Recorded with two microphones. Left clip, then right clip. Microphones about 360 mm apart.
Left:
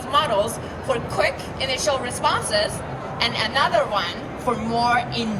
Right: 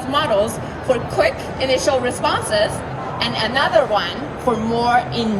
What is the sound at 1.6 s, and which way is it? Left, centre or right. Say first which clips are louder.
A woman's voice: right 6 dB; left.